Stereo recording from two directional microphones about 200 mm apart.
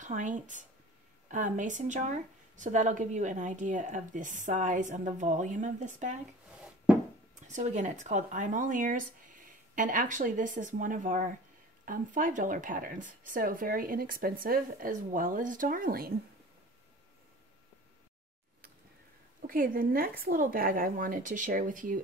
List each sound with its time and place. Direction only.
0.0 s speech: 40° right (ahead or behind)
7.4 s speech: 35° right (ahead or behind)
19.4 s speech: 45° right (ahead or behind)